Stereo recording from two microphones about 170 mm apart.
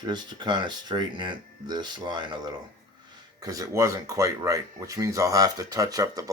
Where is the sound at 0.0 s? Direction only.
25° right (ahead or behind).